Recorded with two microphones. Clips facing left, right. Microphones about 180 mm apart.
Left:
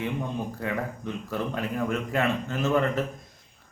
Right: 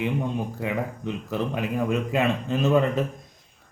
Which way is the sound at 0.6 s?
15° right (ahead or behind).